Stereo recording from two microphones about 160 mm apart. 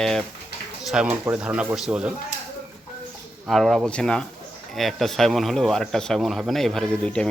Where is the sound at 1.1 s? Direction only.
10° right (ahead or behind).